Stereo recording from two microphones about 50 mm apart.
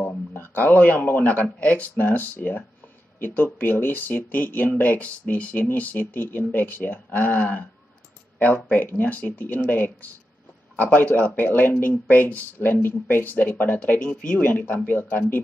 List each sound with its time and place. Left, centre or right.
0.3 s speech: left
13.9 s speech: centre
14.9 s speech: left